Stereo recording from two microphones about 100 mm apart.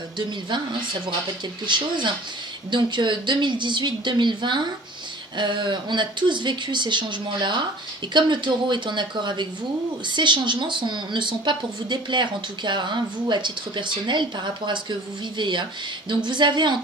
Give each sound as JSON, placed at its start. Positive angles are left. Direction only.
{"t": 1.7, "sound": "a woman's voice", "side_deg": -50}